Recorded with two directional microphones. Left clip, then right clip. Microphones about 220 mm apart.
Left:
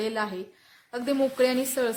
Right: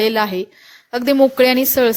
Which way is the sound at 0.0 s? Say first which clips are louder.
Right 13 dB; 35° right (ahead or behind).